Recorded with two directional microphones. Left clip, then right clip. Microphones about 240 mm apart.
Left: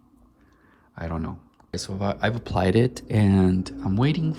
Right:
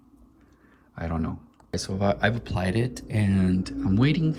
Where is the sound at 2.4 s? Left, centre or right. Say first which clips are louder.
Left 7 dB; left.